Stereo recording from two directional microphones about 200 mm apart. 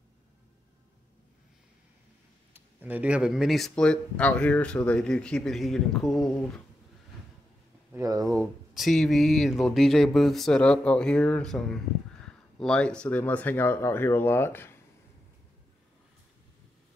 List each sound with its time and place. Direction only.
2.5 s speech: 10° right (ahead or behind)
7.9 s speech: 15° right (ahead or behind)
8.3 s speech: centre (ahead or behind)